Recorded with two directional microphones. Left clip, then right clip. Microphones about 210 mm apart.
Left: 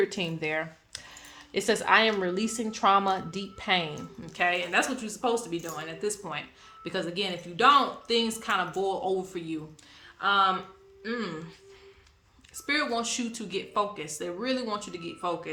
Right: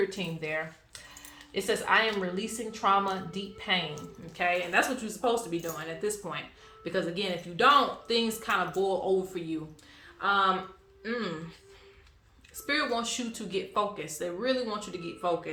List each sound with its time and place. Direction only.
0.1 s speech: 50° left (ahead or behind)
4.3 s speech: 35° left (ahead or behind)
4.8 s speech: 15° left (ahead or behind)
12.6 s speech: 20° left (ahead or behind)